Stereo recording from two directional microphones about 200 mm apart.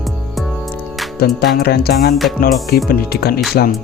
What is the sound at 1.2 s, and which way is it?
Speech, 50° left (ahead or behind).